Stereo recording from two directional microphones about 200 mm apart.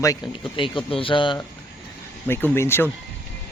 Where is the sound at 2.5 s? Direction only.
10° left (ahead or behind).